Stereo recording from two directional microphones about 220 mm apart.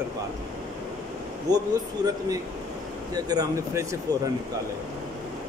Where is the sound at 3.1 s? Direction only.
15° right (ahead or behind).